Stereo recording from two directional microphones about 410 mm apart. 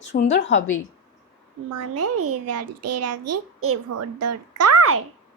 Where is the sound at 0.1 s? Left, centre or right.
Left.